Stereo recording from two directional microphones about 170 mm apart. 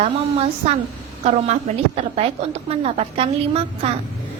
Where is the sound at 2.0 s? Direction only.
35° right (ahead or behind).